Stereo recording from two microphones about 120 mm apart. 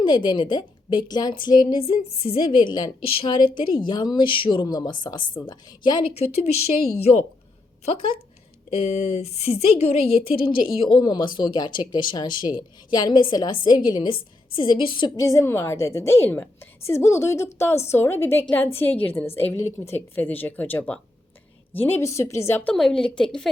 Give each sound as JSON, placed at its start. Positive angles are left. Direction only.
{"t": 0.0, "sound": "a woman's voice", "side_deg": 40}
{"t": 1.8, "sound": "a woman's voice", "side_deg": 55}
{"t": 3.0, "sound": "a woman's voice", "side_deg": 50}
{"t": 6.1, "sound": "a woman's voice", "side_deg": 60}
{"t": 8.7, "sound": "a woman's voice", "side_deg": 55}
{"t": 15.2, "sound": "a woman's voice", "side_deg": 25}
{"t": 22.7, "sound": "a woman's voice", "side_deg": 5}